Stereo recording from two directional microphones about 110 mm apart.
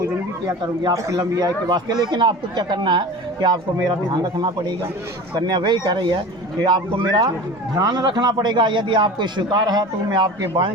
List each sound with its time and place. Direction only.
0.9 s a man's voice: 30° right (ahead or behind)
10.5 s speech: 50° right (ahead or behind)